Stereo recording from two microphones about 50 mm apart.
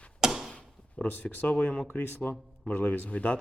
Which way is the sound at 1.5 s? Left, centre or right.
Left.